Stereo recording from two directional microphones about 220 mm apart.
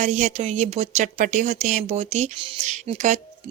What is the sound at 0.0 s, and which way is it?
Speech, 35° right (ahead or behind).